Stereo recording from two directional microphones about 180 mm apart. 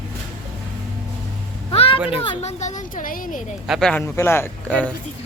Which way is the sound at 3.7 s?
5° left (ahead or behind).